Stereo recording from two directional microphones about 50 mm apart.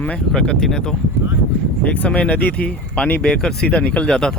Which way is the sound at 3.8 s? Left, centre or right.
Left.